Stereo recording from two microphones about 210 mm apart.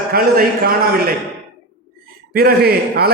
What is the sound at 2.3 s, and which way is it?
Speech, 45° right (ahead or behind).